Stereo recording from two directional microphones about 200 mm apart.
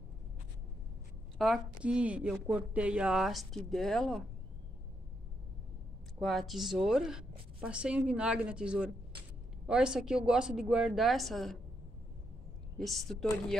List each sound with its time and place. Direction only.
1.4 s a woman's voice: 5° right (ahead or behind)
6.1 s a woman's voice: centre (ahead or behind)
12.7 s a woman's voice: centre (ahead or behind)